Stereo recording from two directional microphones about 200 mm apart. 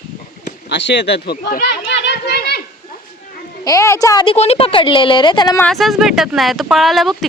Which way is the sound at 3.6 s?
15° left (ahead or behind).